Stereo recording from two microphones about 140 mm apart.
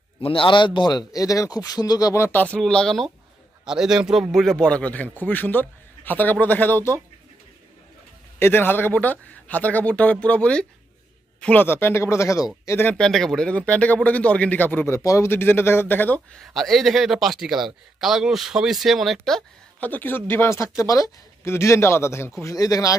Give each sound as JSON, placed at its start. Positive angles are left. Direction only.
{"t": 0.2, "sound": "speech", "side_deg": 40}
{"t": 8.4, "sound": "speech", "side_deg": 15}
{"t": 16.3, "sound": "speech", "side_deg": 0}
{"t": 19.9, "sound": "speech", "side_deg": 15}